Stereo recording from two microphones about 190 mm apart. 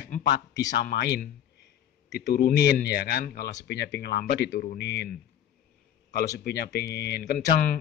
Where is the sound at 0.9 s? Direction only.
60° left (ahead or behind).